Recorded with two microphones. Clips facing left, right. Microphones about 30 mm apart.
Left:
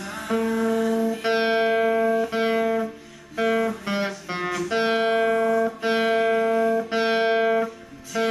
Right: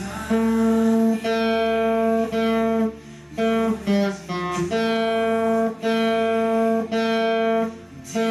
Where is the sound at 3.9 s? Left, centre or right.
Left.